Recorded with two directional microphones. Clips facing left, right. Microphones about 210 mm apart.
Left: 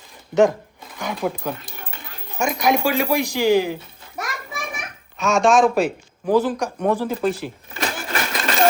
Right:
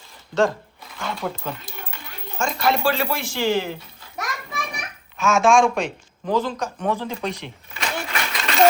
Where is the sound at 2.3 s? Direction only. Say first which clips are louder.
Left 3 dB; 15° left (ahead or behind).